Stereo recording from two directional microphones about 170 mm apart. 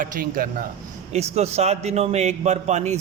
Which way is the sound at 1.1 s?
40° right (ahead or behind).